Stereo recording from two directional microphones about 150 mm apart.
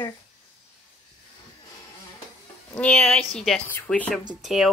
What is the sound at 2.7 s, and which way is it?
Speech, 5° left (ahead or behind).